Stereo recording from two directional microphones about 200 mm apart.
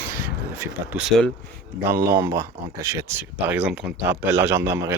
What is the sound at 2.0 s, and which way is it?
Speech, 15° right (ahead or behind).